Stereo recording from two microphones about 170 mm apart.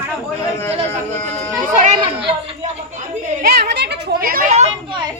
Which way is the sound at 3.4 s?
65° right (ahead or behind).